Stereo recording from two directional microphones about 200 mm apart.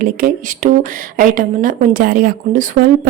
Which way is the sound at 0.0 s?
45° right (ahead or behind).